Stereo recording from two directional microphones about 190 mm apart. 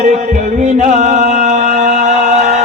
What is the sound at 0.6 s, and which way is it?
Music, 40° right (ahead or behind).